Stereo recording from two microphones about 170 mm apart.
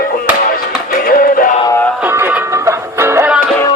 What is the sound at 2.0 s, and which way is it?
Music, 10° right (ahead or behind).